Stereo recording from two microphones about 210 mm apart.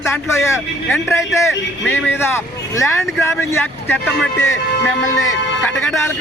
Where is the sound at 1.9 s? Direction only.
10° left (ahead or behind).